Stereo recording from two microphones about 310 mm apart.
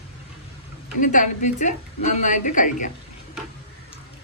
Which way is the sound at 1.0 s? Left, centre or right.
Left.